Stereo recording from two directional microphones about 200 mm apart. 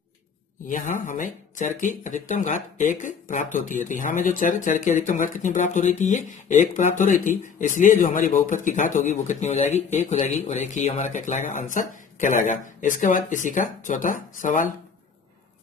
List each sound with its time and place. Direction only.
0.7 s speech: 40° left (ahead or behind)